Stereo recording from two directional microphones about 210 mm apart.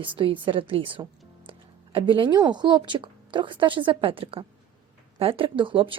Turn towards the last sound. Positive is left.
turn(degrees=-25)  # may be behind; listen again after turning